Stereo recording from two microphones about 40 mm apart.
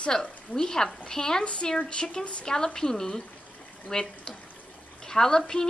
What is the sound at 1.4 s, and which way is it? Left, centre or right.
A woman's voice, left.